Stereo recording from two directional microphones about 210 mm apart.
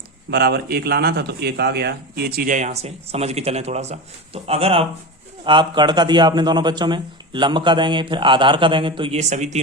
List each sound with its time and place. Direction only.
0.3 s a man's voice: 50° right (ahead or behind); by 9.6 s 35° right (ahead or behind)